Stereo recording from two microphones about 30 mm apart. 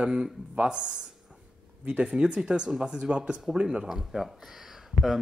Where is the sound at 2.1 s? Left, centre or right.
Right.